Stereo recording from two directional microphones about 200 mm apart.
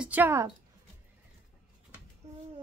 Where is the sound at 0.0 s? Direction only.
10° right (ahead or behind).